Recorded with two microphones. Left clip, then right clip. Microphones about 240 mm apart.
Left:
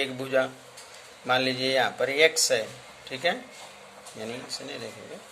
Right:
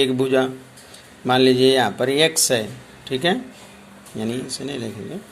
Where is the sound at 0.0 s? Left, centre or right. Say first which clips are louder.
Right 8 dB; centre.